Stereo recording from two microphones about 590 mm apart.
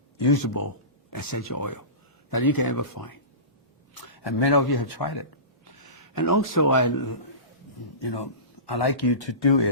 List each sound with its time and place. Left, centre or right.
0.2 s speech: left
7.8 s speech: left